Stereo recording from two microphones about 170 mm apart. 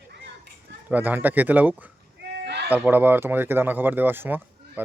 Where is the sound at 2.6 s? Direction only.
10° right (ahead or behind).